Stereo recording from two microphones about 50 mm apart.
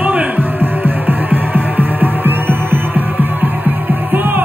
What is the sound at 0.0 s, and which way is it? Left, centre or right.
Hum, right.